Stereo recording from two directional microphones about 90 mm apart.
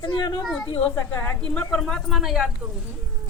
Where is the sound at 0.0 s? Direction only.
60° left (ahead or behind).